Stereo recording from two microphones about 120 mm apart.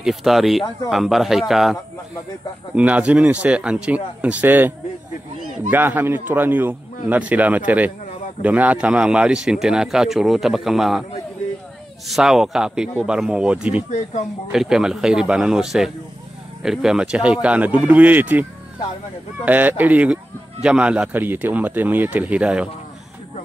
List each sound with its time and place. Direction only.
0.0 s speech: centre (ahead or behind)
12.1 s speech: 5° right (ahead or behind)
19.4 s speech: 15° right (ahead or behind)